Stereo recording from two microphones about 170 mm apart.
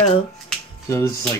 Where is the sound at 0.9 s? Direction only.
15° left (ahead or behind).